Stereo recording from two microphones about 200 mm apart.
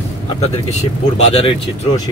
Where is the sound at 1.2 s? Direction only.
30° left (ahead or behind).